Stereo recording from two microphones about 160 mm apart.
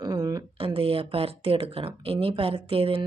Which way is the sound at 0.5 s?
35° right (ahead or behind).